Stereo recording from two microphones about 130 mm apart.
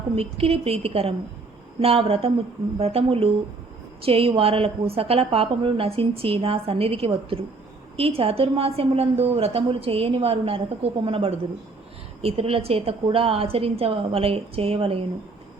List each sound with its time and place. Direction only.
0.2 s a woman's voice: 50° right (ahead or behind)